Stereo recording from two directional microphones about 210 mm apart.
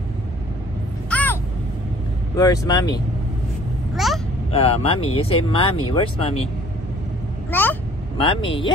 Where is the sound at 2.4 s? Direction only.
15° left (ahead or behind).